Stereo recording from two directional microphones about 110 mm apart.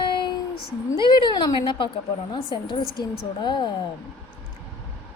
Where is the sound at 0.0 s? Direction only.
45° left (ahead or behind).